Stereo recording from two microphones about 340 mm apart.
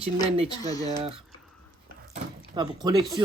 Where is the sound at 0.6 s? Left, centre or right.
Centre.